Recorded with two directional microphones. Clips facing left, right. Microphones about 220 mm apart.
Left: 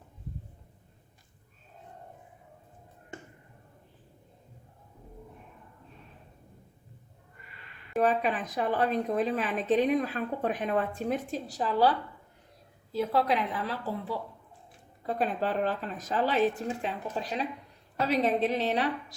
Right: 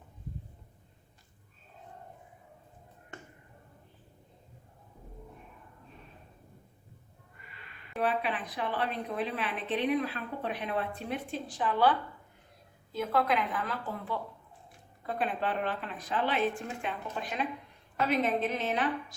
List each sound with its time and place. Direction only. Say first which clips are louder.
7.9 s a woman's voice: left 5 dB; 45° left (ahead or behind)
13.1 s a woman's voice: even; 35° left (ahead or behind)